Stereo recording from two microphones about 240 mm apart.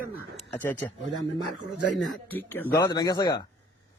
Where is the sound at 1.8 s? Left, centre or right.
Left.